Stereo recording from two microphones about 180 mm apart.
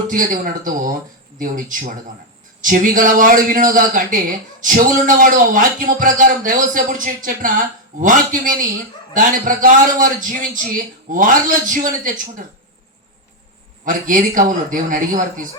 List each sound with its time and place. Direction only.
0.1 s a man's voice: 50° right (ahead or behind)
13.8 s a man's voice: 50° right (ahead or behind)